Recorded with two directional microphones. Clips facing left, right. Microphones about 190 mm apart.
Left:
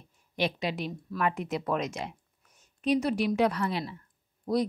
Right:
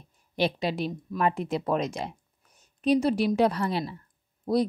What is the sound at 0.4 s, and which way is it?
A woman's voice, 30° right (ahead or behind).